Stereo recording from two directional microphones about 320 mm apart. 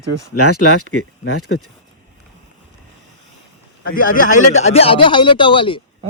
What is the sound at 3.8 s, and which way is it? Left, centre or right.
Speech, left.